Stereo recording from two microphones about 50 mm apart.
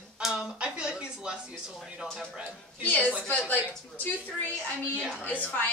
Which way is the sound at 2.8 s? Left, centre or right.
Left.